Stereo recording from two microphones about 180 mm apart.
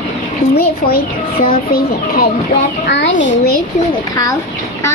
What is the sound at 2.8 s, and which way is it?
Speech, 75° left (ahead or behind).